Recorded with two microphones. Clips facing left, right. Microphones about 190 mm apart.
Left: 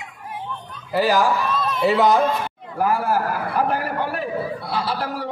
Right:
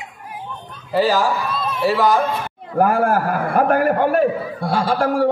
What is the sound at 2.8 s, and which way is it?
A man's voice, 50° right (ahead or behind).